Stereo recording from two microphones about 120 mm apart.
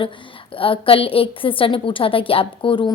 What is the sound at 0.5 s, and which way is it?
A woman's voice, 50° left (ahead or behind).